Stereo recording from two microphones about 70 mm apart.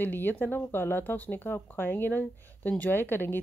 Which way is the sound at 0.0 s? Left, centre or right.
Left.